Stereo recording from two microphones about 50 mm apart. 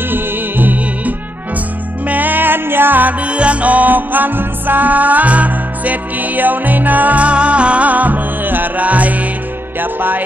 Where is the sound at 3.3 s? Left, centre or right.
Right.